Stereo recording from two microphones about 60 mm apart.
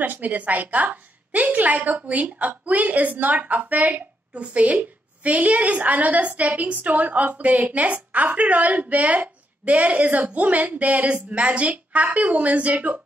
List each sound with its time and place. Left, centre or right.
0.0 s a woman's voice: right